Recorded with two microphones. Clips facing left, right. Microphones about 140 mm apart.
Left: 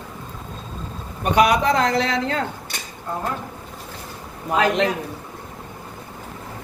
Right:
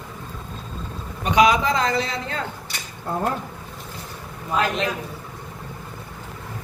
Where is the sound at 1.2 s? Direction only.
60° left (ahead or behind).